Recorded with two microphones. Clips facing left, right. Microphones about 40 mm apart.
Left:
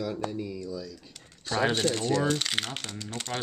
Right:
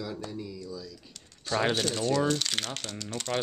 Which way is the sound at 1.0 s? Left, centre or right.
Centre.